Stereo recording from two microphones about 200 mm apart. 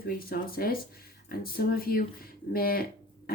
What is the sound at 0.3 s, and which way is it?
Speech, 50° left (ahead or behind).